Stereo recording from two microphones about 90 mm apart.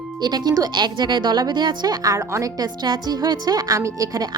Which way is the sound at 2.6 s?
50° right (ahead or behind).